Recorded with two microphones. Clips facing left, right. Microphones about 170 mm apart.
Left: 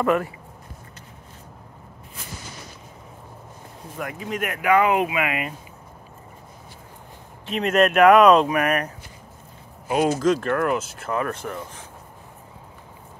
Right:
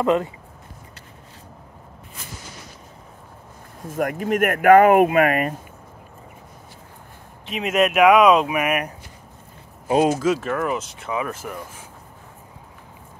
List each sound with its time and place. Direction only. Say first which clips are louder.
0.0 s speech: right 2 dB; 20° right (ahead or behind)
3.8 s speech: right 8 dB; 45° right (ahead or behind)
7.4 s speech: left 1 dB; 5° right (ahead or behind)
10.1 s speech: left 1 dB; 5° right (ahead or behind)